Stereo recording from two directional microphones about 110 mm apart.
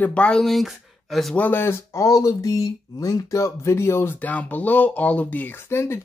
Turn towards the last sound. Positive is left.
turn(degrees=25)  # may be behind; listen again after turning